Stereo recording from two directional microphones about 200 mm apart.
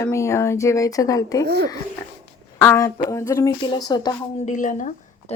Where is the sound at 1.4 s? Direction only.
55° right (ahead or behind).